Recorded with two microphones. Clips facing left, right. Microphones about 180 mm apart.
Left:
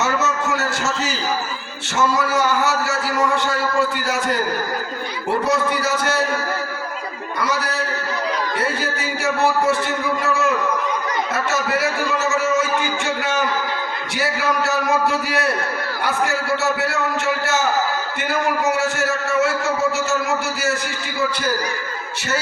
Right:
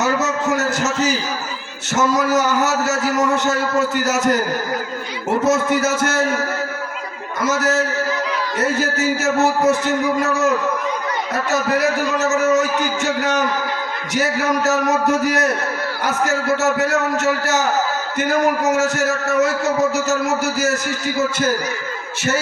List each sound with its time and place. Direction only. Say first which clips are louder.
0.4 s a sound: right 3 dB; 40° right (ahead or behind)
2.5 s a man's voice: right 2 dB; 40° right (ahead or behind)
5.5 s a man's voice: right 5 dB; 45° right (ahead or behind)
7.4 s a man's voice: right 6 dB; 45° right (ahead or behind)
11.5 s a man's voice: right 5 dB; 40° right (ahead or behind)
15.2 s a man's voice: right 3 dB; 45° right (ahead or behind)